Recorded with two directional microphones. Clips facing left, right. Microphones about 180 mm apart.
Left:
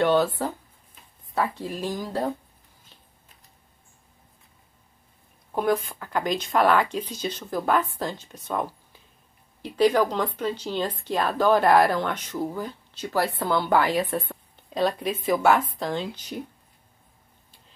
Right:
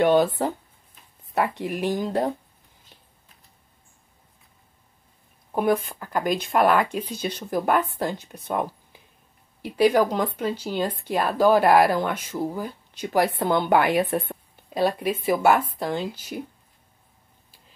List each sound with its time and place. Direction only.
0.0 s speech: 15° right (ahead or behind)
1.6 s speech: 15° right (ahead or behind)
5.5 s speech: 15° right (ahead or behind)